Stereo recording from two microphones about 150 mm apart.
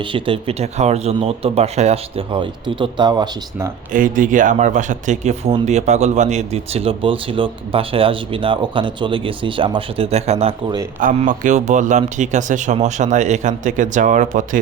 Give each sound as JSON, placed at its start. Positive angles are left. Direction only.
{"t": 0.0, "sound": "speech", "side_deg": -35}
{"t": 3.9, "sound": "speech", "side_deg": -60}
{"t": 11.2, "sound": "speech", "side_deg": -55}